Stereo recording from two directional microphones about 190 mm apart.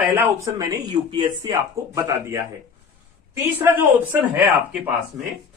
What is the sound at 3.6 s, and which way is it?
Speech, 10° right (ahead or behind).